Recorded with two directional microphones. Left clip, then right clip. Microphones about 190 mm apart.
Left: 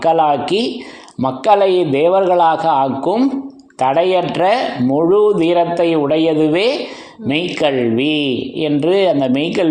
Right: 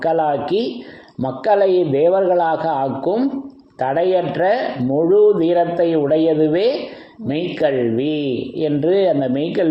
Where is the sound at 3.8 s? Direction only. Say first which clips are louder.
Left 3 dB; 20° left (ahead or behind).